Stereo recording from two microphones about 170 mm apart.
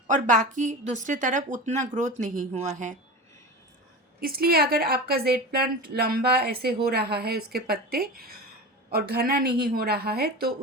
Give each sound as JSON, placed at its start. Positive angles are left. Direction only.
{"t": 0.1, "sound": "a woman's voice", "side_deg": -45}
{"t": 4.2, "sound": "a woman's voice", "side_deg": -60}